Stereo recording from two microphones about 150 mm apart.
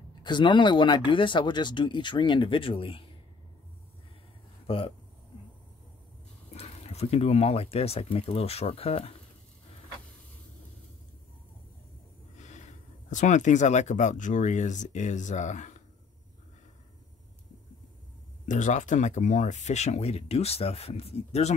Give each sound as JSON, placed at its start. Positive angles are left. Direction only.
{"t": 0.2, "sound": "speech", "side_deg": 30}
{"t": 4.6, "sound": "speech", "side_deg": 35}
{"t": 6.5, "sound": "speech", "side_deg": 45}
{"t": 12.4, "sound": "speech", "side_deg": 50}
{"t": 18.4, "sound": "speech", "side_deg": 55}